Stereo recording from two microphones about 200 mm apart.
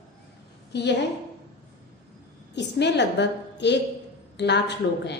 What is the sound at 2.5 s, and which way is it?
A woman's voice, 60° left (ahead or behind).